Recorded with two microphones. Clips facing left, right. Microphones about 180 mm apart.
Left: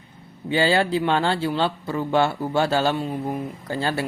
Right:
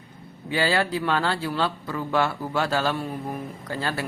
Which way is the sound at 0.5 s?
25° left (ahead or behind).